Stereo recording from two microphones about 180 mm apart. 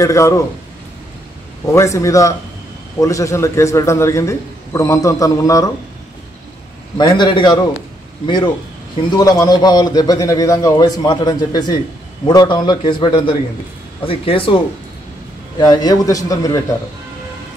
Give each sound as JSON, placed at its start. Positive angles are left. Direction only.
{"t": 0.0, "sound": "a man's voice", "side_deg": 15}
{"t": 1.7, "sound": "a man's voice", "side_deg": 15}
{"t": 7.0, "sound": "a man's voice", "side_deg": 25}
{"t": 9.1, "sound": "a man's voice", "side_deg": 20}
{"t": 15.6, "sound": "a man's voice", "side_deg": 20}